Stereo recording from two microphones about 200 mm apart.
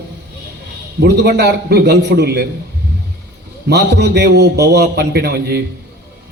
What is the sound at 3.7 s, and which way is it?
A man's voice, 55° right (ahead or behind).